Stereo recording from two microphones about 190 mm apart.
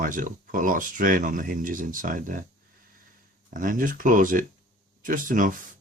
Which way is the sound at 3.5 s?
45° right (ahead or behind).